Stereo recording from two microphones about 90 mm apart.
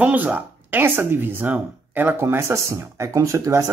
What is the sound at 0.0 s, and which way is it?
Speech, 20° right (ahead or behind).